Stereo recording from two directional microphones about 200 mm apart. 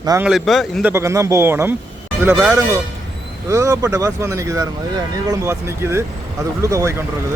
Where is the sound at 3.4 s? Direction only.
15° right (ahead or behind).